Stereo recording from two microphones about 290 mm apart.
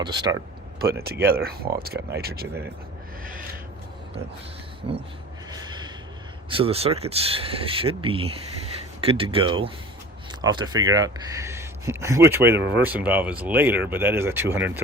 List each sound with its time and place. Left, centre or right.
0.0 s speech: centre
1.0 s speech: right
5.5 s gasp: centre
6.5 s speech: centre